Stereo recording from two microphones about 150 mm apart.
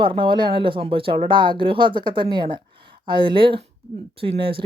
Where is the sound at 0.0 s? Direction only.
35° right (ahead or behind).